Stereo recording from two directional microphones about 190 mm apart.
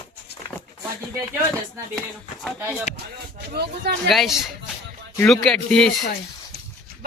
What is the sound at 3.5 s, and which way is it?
Speech, 60° right (ahead or behind).